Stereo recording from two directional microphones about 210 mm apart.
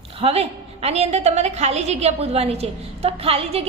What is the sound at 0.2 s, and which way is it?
A woman's voice, 30° right (ahead or behind).